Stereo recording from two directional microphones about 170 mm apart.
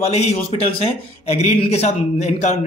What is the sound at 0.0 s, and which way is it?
A man's voice, 40° left (ahead or behind).